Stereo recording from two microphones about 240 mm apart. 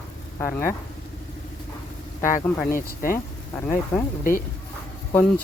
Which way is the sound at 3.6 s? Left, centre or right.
Centre.